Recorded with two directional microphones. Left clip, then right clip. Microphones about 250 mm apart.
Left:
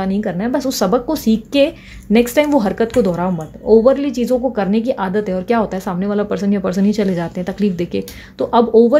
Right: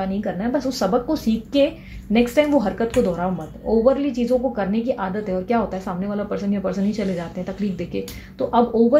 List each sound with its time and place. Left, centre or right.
0.0 s speech: left